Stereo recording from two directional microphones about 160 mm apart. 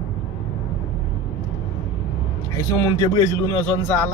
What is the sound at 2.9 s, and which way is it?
A man's voice, 25° left (ahead or behind).